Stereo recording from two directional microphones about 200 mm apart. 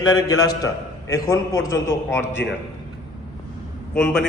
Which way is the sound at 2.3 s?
60° left (ahead or behind).